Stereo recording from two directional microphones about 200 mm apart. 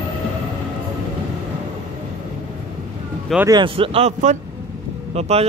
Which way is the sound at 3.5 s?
25° right (ahead or behind).